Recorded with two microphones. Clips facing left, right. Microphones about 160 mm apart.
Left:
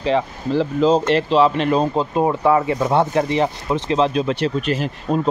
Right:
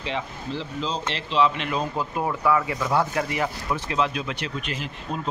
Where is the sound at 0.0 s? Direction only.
40° left (ahead or behind).